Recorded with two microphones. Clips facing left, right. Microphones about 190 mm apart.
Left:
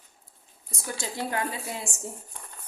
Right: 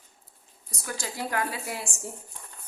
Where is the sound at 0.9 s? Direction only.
25° left (ahead or behind).